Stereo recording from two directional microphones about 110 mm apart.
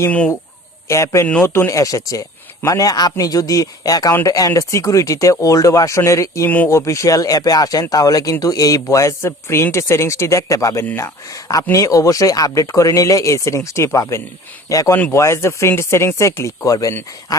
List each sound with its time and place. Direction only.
0.1 s speech: 15° left (ahead or behind)
0.9 s speech: 25° left (ahead or behind)